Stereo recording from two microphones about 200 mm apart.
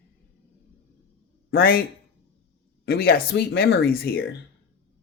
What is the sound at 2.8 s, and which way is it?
Speech, 50° left (ahead or behind).